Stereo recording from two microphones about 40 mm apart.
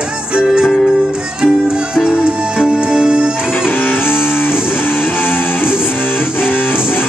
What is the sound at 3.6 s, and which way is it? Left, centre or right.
Music, left.